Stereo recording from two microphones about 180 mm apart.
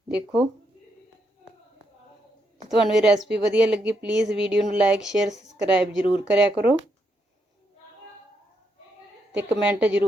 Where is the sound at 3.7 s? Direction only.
70° right (ahead or behind).